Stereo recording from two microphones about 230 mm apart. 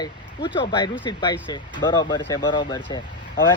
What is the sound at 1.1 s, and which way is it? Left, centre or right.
Speech, centre.